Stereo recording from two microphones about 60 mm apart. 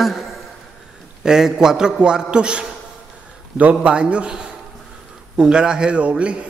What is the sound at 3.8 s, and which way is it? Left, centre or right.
A man's voice, centre.